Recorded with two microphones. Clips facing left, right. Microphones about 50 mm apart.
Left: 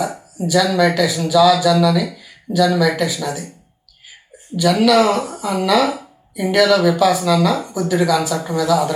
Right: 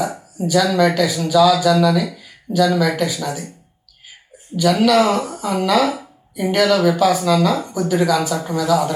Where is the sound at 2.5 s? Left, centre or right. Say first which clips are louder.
Even; left.